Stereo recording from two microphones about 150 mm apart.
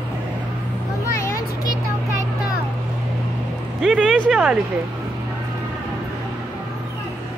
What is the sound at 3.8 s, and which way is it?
Speech, centre (ahead or behind).